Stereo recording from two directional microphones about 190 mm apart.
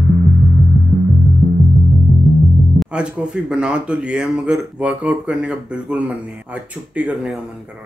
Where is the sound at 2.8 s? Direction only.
5° right (ahead or behind).